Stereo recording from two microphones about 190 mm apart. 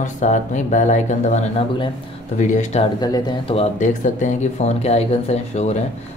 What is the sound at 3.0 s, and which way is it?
Speech, 20° left (ahead or behind).